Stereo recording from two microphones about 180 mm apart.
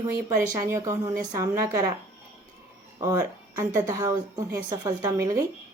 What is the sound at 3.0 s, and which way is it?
A woman's voice, 20° right (ahead or behind).